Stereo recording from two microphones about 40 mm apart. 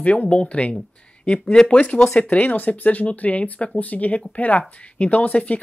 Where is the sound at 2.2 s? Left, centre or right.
Left.